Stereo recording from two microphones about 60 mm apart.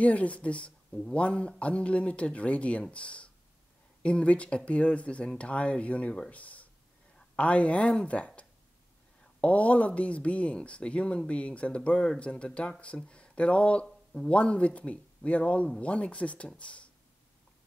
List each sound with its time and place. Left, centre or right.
0.0 s speech: left
9.4 s speech: left